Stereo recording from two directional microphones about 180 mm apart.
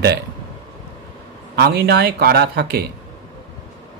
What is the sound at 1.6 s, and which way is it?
Speech, 65° right (ahead or behind).